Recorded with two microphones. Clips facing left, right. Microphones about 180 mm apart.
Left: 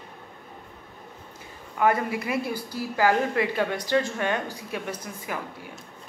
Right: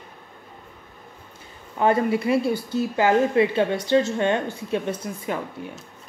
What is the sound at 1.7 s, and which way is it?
A woman's voice, 30° right (ahead or behind).